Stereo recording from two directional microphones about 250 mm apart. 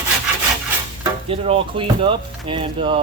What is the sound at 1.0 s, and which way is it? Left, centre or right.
Speech, right.